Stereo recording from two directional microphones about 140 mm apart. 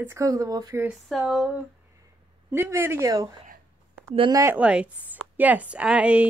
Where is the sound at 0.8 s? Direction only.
5° right (ahead or behind).